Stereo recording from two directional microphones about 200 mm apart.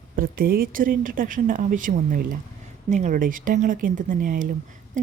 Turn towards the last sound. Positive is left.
turn(degrees=-40)  # may be behind; listen again after turning